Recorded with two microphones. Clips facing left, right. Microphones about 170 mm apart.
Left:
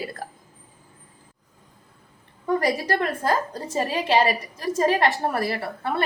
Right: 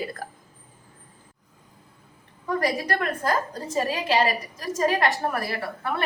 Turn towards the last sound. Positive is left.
turn(degrees=30)  # may be behind; listen again after turning